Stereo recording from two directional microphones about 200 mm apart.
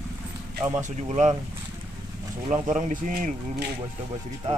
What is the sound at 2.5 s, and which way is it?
Speech, 40° right (ahead or behind).